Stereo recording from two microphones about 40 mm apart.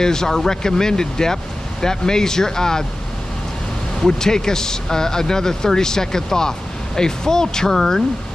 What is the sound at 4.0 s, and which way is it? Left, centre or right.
Speech, centre.